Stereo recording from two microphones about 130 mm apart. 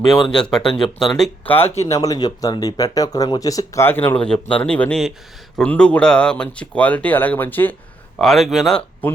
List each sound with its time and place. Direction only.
0.1 s speech: 5° left (ahead or behind)
1.9 s speech: 25° left (ahead or behind)
8.2 s speech: centre (ahead or behind)
9.0 s speech: 15° left (ahead or behind)